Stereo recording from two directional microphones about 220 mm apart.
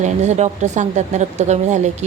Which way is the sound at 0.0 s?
30° right (ahead or behind).